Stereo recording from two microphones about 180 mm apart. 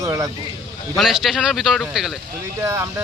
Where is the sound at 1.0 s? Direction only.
Centre (ahead or behind).